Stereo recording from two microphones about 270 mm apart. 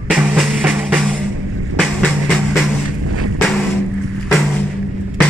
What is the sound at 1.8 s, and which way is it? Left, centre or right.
Vehicle, centre.